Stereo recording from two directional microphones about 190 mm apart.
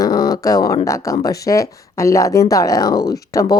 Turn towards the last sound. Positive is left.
turn(degrees=15)  # may be behind; listen again after turning